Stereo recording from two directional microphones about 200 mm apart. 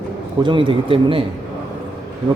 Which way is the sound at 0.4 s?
25° right (ahead or behind).